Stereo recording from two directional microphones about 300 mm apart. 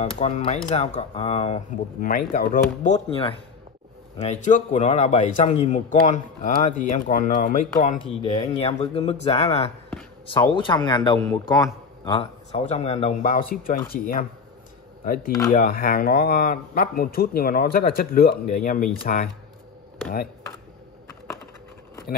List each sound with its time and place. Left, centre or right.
0.0 s a man's voice: left
15.5 s a man's voice: left